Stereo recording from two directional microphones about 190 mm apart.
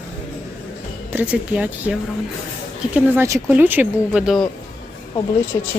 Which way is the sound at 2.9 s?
10° right (ahead or behind).